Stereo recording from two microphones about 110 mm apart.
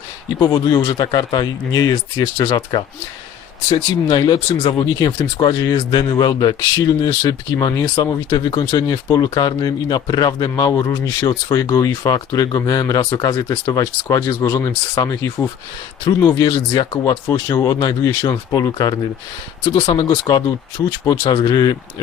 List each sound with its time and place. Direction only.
0.3 s speech: 35° left (ahead or behind)
4.1 s speech: 40° left (ahead or behind)
19.8 s speech: 45° left (ahead or behind)